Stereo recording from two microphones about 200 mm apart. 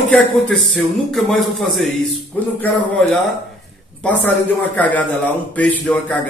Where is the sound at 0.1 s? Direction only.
Centre (ahead or behind).